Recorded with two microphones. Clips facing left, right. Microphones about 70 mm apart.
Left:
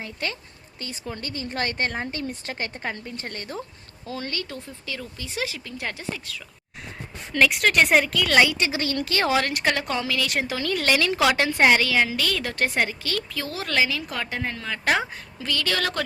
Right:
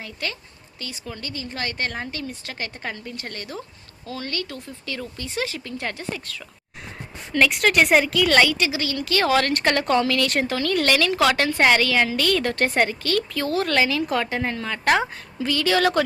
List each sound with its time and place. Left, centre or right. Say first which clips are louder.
0.0 s speech: even; left
4.9 s speech: right 3 dB; centre
6.1 s a woman's voice: right 2 dB; centre
8.4 s speech: left 2 dB; left
8.7 s speech: right 1 dB; left
9.3 s a woman's voice: right 4 dB; centre